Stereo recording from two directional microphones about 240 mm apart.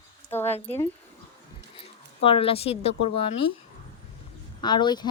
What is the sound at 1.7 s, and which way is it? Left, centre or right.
Speech, left.